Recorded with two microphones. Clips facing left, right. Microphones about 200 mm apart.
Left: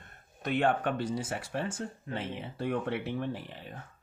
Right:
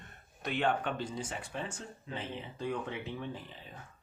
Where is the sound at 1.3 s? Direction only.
65° left (ahead or behind).